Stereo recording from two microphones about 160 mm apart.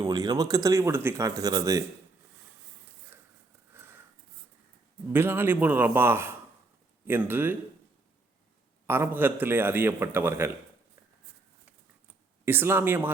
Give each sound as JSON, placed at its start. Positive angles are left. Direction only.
{"t": 0.0, "sound": "speech", "side_deg": -25}
{"t": 3.8, "sound": "a sound", "side_deg": -15}
{"t": 5.1, "sound": "a man's voice", "side_deg": -15}
{"t": 8.9, "sound": "a man's voice", "side_deg": -15}
{"t": 12.5, "sound": "a man's voice", "side_deg": -15}